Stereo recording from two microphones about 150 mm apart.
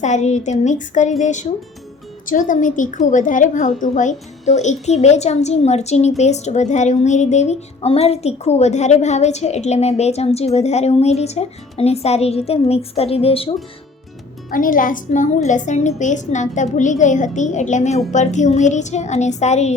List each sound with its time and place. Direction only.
0.0 s a woman's voice: 50° left (ahead or behind)
14.5 s a woman's voice: 65° left (ahead or behind); by 19.7 s 50° left (ahead or behind)